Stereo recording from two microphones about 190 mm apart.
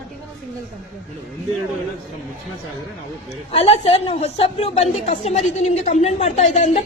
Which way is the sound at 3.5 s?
30° left (ahead or behind).